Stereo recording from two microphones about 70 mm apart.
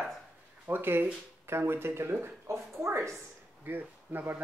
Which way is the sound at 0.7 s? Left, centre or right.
Right.